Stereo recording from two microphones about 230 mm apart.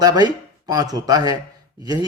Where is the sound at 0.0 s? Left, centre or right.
Centre.